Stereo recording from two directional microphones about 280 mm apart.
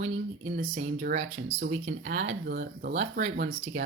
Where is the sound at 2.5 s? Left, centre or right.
Right.